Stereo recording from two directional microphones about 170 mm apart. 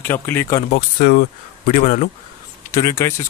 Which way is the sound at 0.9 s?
45° left (ahead or behind).